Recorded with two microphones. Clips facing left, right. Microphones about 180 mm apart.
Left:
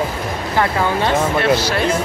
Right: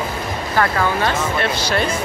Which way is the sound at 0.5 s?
20° left (ahead or behind).